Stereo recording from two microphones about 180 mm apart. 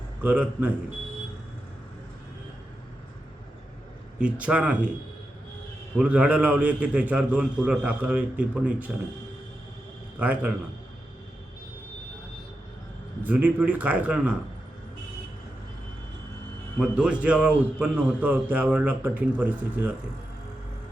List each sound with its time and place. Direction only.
0.2 s a man's voice: 10° right (ahead or behind)
4.2 s a man's voice: 5° right (ahead or behind)
6.0 s a man's voice: 5° right (ahead or behind)
10.2 s a man's voice: 10° right (ahead or behind)
13.2 s a man's voice: 10° right (ahead or behind)
16.7 s a man's voice: 5° right (ahead or behind)